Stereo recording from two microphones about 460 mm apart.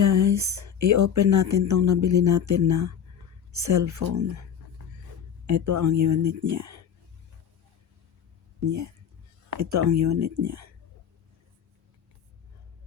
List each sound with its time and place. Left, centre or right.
0.0 s speech: right
5.5 s speech: right
9.5 s speech: right